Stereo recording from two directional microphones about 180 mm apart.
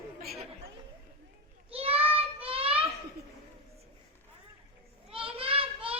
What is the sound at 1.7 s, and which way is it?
Child singing, 35° right (ahead or behind).